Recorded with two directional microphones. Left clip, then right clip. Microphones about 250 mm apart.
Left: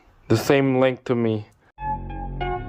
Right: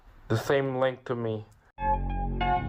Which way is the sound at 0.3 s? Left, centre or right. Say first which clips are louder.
Left 7 dB; left.